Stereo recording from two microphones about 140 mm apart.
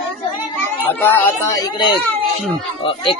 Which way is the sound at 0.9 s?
15° left (ahead or behind).